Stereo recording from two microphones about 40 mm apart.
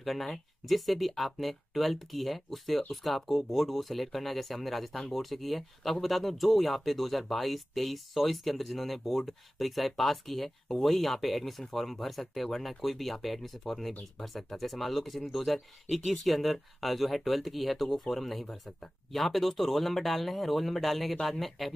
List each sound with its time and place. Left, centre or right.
0.0 s speech: centre